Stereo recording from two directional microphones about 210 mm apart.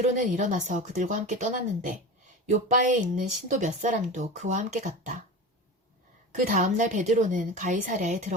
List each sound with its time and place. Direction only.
0.0 s speech: 35° right (ahead or behind)
6.5 s speech: 35° right (ahead or behind)